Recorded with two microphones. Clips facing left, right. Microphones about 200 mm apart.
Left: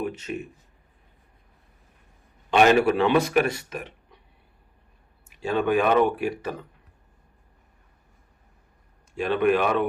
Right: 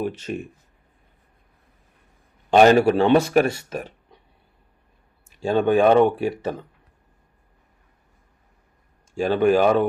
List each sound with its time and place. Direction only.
0.3 s speech: 40° right (ahead or behind)
2.5 s a man's voice: 35° right (ahead or behind)
5.4 s speech: 30° right (ahead or behind)
9.1 s a man's voice: 30° right (ahead or behind)